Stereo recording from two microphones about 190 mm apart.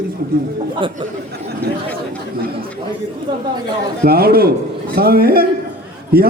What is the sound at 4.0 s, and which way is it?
A man's voice, 55° right (ahead or behind).